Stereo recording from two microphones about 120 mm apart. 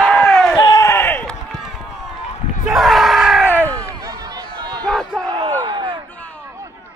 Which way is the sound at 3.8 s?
30° right (ahead or behind).